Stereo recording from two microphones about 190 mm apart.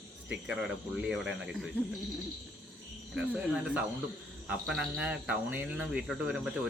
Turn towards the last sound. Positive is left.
turn(degrees=0)  # may be behind; listen again after turning